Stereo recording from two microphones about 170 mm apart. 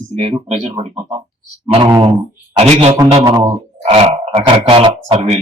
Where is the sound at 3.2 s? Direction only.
25° right (ahead or behind).